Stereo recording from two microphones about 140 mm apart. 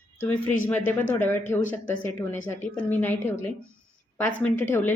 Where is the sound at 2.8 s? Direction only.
10° left (ahead or behind).